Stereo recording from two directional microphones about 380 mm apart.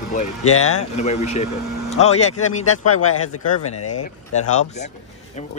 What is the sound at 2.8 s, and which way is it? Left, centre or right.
Speech, left.